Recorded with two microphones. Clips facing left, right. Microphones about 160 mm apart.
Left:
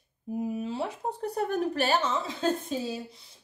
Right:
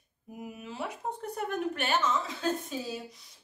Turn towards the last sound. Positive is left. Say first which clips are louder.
# left 3 dB
turn(degrees=30)  # may be behind; listen again after turning